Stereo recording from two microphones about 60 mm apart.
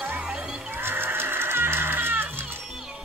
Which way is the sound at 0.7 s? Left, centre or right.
Right.